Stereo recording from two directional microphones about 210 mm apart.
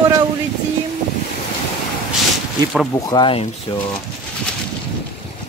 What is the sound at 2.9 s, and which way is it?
Speech, 20° left (ahead or behind).